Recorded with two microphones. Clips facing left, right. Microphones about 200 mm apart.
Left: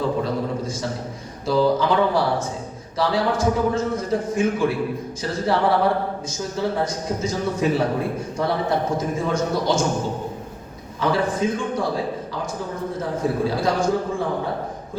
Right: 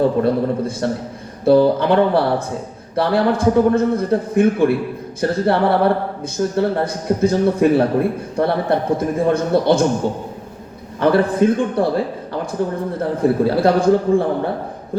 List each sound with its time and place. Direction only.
0.2 s speech: 60° right (ahead or behind)
11.0 s speech: 60° right (ahead or behind)